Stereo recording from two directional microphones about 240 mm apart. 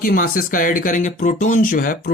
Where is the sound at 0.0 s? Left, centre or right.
Left.